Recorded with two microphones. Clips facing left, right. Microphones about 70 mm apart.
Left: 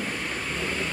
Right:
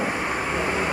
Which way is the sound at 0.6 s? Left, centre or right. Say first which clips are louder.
Right 5 dB; right.